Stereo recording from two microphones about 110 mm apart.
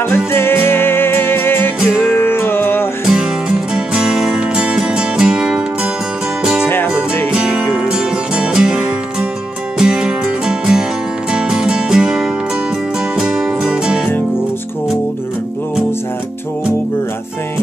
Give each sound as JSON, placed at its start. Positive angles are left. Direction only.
{"t": 0.0, "sound": "music", "side_deg": 20}
{"t": 3.1, "sound": "music", "side_deg": -5}